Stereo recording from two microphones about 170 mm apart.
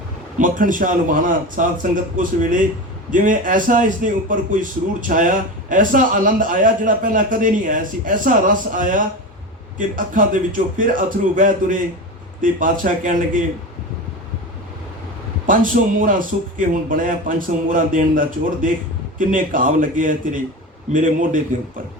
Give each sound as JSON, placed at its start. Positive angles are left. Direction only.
{"t": 0.3, "sound": "a man's voice", "side_deg": -50}
{"t": 15.4, "sound": "a man's voice", "side_deg": -50}